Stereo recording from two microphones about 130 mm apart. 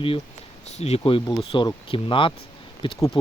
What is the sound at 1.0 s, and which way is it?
Speech, 40° left (ahead or behind).